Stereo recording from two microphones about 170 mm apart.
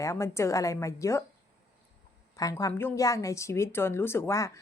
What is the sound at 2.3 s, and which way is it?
A woman's voice, 20° left (ahead or behind).